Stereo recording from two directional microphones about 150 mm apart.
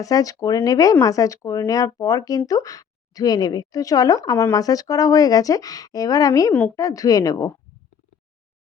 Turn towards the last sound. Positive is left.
turn(degrees=25)  # may be behind; listen again after turning